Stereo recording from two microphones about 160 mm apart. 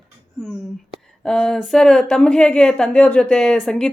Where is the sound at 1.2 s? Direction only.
5° left (ahead or behind).